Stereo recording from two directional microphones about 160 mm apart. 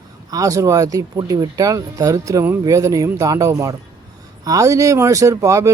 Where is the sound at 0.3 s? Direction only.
20° right (ahead or behind).